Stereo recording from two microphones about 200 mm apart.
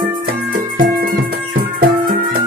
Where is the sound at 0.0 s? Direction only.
45° right (ahead or behind).